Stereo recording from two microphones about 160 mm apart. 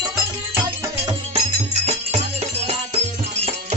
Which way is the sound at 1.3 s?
40° right (ahead or behind).